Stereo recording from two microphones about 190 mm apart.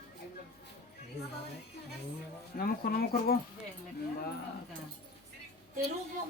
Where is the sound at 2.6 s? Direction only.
50° left (ahead or behind).